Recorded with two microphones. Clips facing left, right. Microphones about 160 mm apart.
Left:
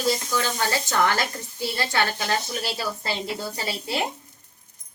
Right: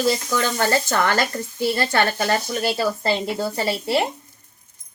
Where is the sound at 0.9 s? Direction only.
55° right (ahead or behind).